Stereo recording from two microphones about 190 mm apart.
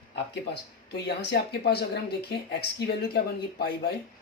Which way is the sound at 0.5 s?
60° left (ahead or behind).